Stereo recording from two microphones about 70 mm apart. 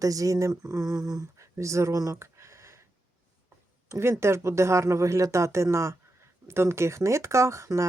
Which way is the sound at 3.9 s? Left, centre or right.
Right.